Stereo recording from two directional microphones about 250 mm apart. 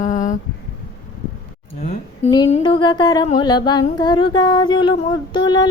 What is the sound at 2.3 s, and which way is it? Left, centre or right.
Music, left.